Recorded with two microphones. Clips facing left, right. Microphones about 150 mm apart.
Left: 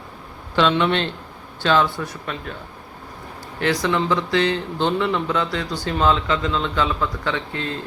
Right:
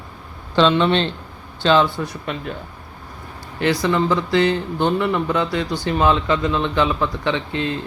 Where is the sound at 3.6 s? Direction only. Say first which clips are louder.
Right 2 dB; 10° right (ahead or behind).